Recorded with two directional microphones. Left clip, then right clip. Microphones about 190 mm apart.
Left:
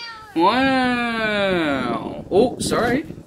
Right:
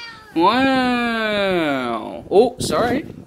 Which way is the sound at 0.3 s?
20° right (ahead or behind).